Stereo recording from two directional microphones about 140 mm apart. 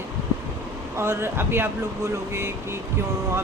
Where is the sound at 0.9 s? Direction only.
20° right (ahead or behind).